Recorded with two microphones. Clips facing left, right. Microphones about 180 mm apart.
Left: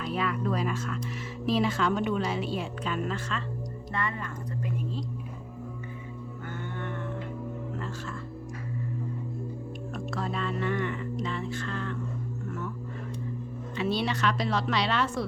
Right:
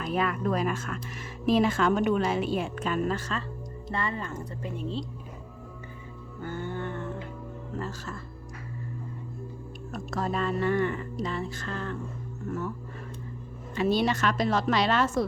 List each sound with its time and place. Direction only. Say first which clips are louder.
0.0 s a woman's voice: right 2 dB; 50° right (ahead or behind); by 5.0 s 30° right (ahead or behind)
6.4 s music: right 5 dB; 30° right (ahead or behind)
9.9 s speech: right 3 dB; 45° right (ahead or behind)
13.7 s a woman's voice: right 4 dB; 45° right (ahead or behind)